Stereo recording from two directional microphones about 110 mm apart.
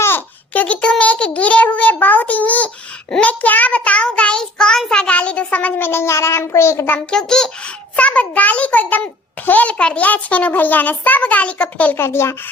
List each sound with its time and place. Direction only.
0.0 s a child's voice: 15° left (ahead or behind)
3.1 s child singing: 10° left (ahead or behind)
7.1 s child singing: 5° left (ahead or behind); by 12.3 s 25° left (ahead or behind)